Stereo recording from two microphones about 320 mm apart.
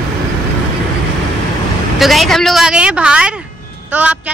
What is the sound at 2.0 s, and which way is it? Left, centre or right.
Speech, centre.